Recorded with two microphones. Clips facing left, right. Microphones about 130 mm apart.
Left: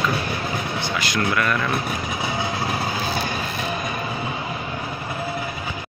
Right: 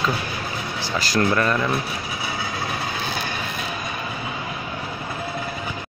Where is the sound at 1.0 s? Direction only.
35° right (ahead or behind).